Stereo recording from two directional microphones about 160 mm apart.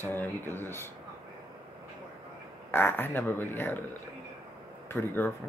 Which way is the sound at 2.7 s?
15° left (ahead or behind).